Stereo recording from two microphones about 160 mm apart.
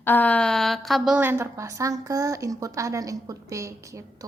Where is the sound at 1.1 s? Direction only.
15° right (ahead or behind).